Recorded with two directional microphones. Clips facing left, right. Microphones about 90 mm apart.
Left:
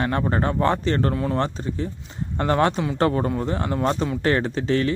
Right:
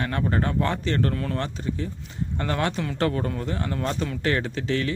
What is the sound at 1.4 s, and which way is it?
Speech, 35° left (ahead or behind).